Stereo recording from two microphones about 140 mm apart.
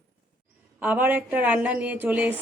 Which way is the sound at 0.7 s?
10° right (ahead or behind).